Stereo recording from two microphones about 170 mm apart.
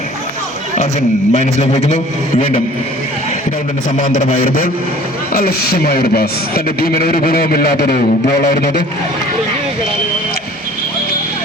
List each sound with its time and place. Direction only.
1.3 s a man's voice: 45° left (ahead or behind)
3.9 s a man's voice: 50° left (ahead or behind)